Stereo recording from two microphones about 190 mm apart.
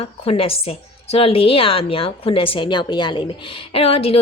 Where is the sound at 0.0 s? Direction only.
30° left (ahead or behind).